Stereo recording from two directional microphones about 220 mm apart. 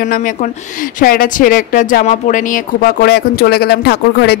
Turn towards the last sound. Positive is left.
turn(degrees=50)  # may be behind; listen again after turning